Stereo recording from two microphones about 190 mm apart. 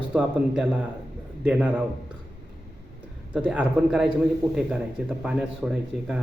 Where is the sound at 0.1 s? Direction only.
5° right (ahead or behind).